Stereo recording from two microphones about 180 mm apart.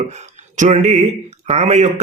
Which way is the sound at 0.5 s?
40° right (ahead or behind).